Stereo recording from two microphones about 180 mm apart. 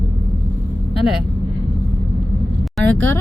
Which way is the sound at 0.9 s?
Centre (ahead or behind).